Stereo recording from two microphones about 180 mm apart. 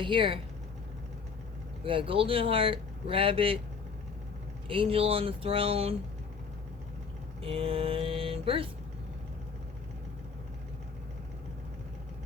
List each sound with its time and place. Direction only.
0.0 s speech: 30° right (ahead or behind)
1.8 s speech: 30° right (ahead or behind)
4.7 s speech: 30° right (ahead or behind)
7.4 s speech: 30° right (ahead or behind)